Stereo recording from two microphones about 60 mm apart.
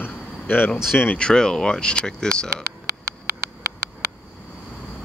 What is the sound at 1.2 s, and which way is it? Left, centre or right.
Speech, centre.